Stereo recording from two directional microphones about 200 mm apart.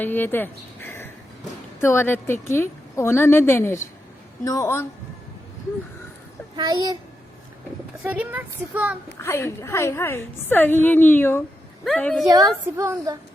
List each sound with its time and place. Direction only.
0.0 s a woman's voice: 10° left (ahead or behind)
6.6 s a child's voice: 20° right (ahead or behind)
8.0 s speech: 5° right (ahead or behind)
9.2 s a woman's voice: 10° left (ahead or behind)
12.2 s speech: 20° right (ahead or behind)